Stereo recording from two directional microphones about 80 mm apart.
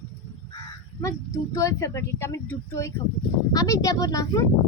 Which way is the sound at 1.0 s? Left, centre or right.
Left.